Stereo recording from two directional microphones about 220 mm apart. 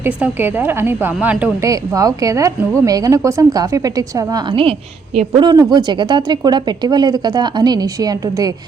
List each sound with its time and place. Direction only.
0.0 s a woman's voice: 10° right (ahead or behind)
5.4 s speech: 20° right (ahead or behind)